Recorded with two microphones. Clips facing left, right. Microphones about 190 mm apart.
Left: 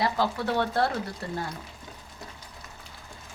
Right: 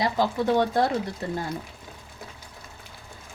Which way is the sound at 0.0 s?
20° right (ahead or behind).